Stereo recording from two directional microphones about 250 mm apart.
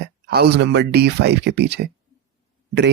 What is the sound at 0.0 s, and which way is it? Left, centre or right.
Speech, right.